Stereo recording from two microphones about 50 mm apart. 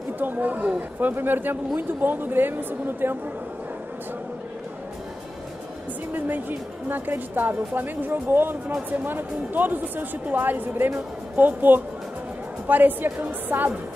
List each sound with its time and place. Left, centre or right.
0.2 s a woman's voice: right
6.1 s speech: right